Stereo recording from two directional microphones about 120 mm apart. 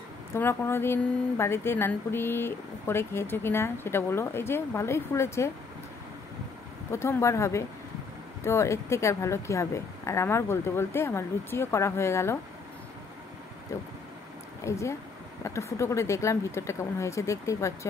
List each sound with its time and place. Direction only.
0.3 s speech: 20° left (ahead or behind)
6.9 s speech: 20° left (ahead or behind)
14.6 s speech: 25° left (ahead or behind)